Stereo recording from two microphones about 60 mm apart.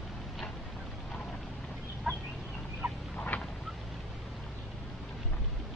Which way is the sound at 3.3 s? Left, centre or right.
Left.